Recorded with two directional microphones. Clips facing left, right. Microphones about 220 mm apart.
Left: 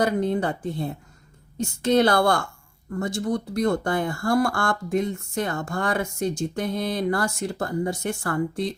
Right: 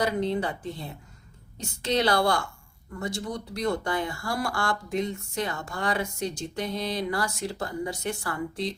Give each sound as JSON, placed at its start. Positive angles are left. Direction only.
{"t": 0.0, "sound": "speech", "side_deg": 50}